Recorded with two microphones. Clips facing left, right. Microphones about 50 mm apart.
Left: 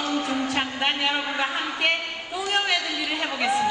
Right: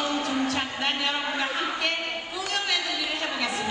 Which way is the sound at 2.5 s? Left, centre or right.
Left.